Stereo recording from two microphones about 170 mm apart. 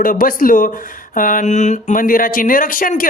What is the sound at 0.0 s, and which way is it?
Speech, 55° left (ahead or behind).